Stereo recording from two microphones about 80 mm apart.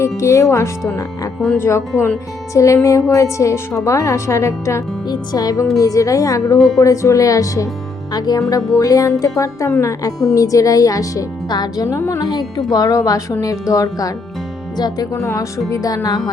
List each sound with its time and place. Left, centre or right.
0.0 s a woman's voice: left
5.0 s speech: left
8.1 s speech: left
11.9 s a woman's voice: left
12.2 s speech: left
14.8 s speech: left
15.1 s a woman's voice: left